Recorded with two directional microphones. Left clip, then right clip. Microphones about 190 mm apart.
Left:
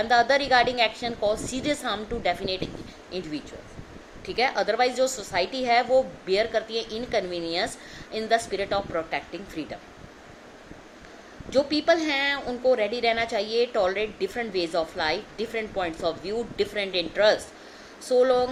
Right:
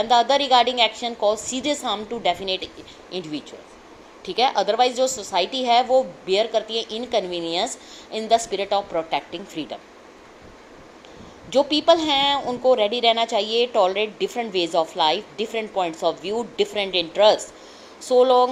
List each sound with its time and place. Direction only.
0.0 s a woman's voice: 15° right (ahead or behind)
4.4 s a woman's voice: 15° right (ahead or behind)
11.5 s a woman's voice: 20° right (ahead or behind)